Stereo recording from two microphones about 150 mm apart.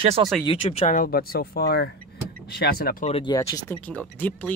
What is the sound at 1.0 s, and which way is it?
Speech, 85° left.